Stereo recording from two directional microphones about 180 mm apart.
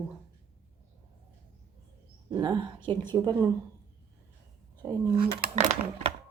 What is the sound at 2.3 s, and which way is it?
Speech, 20° right (ahead or behind).